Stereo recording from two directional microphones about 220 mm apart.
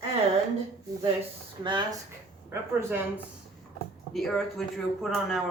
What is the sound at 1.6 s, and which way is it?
Speech, 20° right (ahead or behind).